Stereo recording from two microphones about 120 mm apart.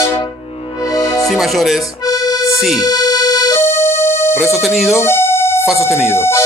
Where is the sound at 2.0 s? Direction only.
30° left (ahead or behind).